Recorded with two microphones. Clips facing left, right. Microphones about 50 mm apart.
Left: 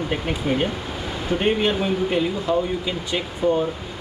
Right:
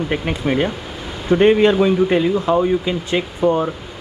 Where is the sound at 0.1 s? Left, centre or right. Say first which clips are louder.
Right 3 dB; right.